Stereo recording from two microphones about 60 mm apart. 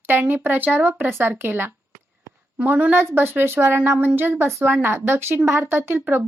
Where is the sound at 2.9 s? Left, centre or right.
Right.